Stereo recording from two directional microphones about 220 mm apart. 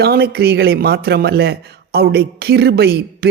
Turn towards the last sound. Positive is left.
turn(degrees=-45)  # may be behind; listen again after turning